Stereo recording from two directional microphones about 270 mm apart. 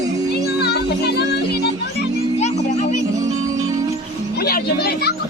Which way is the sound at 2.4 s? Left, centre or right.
Left.